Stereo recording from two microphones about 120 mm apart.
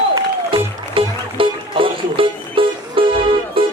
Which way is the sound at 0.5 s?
45° right (ahead or behind).